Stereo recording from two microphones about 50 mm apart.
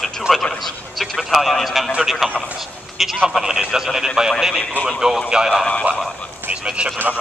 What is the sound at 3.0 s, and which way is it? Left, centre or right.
A man's voice, centre.